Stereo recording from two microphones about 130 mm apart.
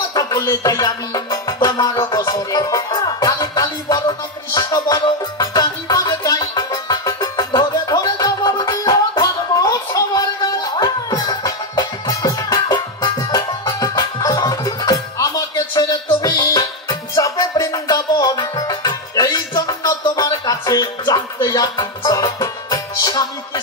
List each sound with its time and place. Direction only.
0.1 s music: 25° left (ahead or behind)